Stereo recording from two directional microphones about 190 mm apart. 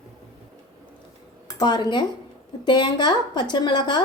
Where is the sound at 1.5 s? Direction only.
20° left (ahead or behind).